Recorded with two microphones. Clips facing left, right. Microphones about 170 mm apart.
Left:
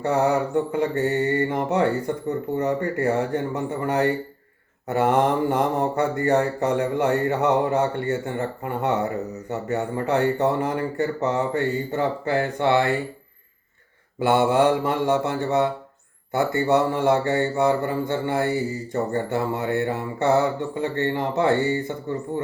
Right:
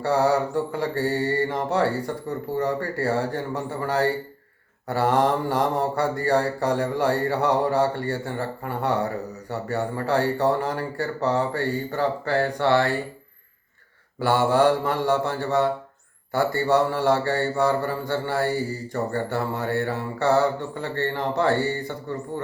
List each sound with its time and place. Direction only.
0.0 s mantra: 20° left (ahead or behind)
14.2 s mantra: 20° left (ahead or behind)